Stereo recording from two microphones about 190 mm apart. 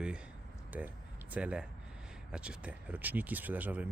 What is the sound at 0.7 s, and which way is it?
Speech, 10° right (ahead or behind).